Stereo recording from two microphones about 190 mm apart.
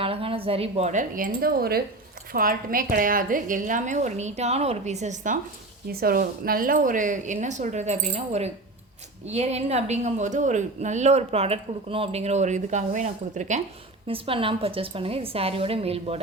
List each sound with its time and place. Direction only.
0.0 s a woman's voice: 30° right (ahead or behind)
5.9 s a woman's voice: 50° right (ahead or behind)
14.1 s a woman's voice: 30° right (ahead or behind)